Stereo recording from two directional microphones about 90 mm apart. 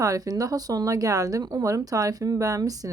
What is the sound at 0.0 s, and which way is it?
Speech, 40° right (ahead or behind).